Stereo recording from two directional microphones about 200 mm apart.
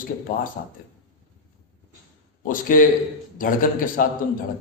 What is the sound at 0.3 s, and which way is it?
Speech, 40° left (ahead or behind).